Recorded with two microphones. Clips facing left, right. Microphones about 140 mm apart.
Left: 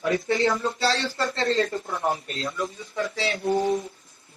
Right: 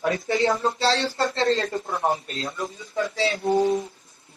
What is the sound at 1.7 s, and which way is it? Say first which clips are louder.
Speech: right 2 dB; 55° right (ahead or behind).